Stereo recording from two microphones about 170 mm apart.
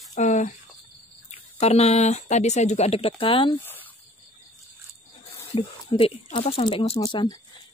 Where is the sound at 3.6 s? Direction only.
10° left (ahead or behind).